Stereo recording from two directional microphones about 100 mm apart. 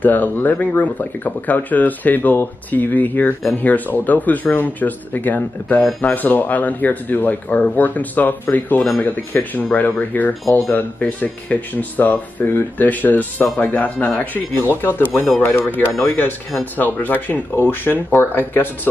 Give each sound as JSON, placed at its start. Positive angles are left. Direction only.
{"t": 0.0, "sound": "speech", "side_deg": 15}